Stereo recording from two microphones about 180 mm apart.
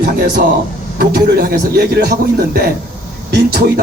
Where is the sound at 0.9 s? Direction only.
60° right (ahead or behind).